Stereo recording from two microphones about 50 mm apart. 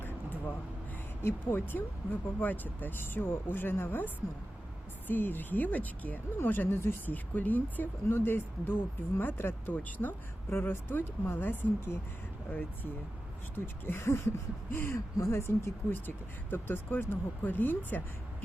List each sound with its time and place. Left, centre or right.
1.2 s speech: left
3.0 s speech: left
6.4 s speech: left
9.7 s speech: left
13.8 s speech: left
14.9 s speech: left
15.4 s speech: left
15.9 s speech: left